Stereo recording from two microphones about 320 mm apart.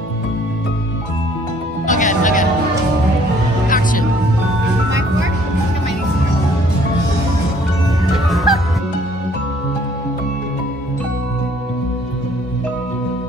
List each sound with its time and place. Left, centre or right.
1.9 s music: left
3.6 s music: left
8.0 s music: centre